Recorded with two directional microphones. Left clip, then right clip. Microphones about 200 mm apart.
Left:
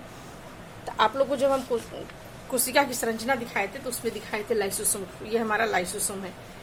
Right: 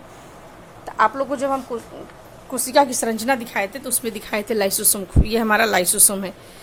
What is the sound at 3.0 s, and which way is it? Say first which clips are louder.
A woman's voice: right 6 dB; 45° right (ahead or behind).